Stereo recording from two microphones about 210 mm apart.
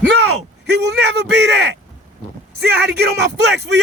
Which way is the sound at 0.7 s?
55° right (ahead or behind).